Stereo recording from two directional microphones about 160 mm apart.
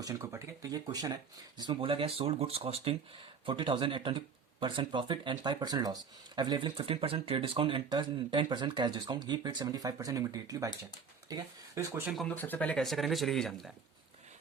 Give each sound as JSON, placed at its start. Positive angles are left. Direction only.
{"t": 0.0, "sound": "speech", "side_deg": -20}
{"t": 12.0, "sound": "speech", "side_deg": 0}
{"t": 12.3, "sound": "speech", "side_deg": 10}